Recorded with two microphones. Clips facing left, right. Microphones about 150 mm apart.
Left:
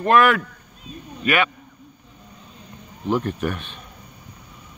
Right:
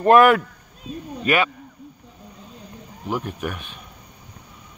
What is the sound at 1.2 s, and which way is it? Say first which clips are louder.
Speech: right 1 dB; 30° right (ahead or behind).